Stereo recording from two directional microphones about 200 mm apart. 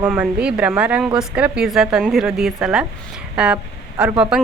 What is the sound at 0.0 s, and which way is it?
A woman's voice, 5° right (ahead or behind).